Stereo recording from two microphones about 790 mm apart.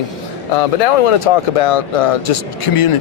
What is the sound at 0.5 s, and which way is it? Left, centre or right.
Speech, left.